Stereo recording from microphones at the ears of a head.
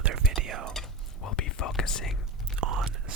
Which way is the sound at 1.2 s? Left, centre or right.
Left.